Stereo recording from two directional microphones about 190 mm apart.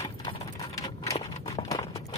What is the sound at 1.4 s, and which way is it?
Clip-clop, 20° left (ahead or behind).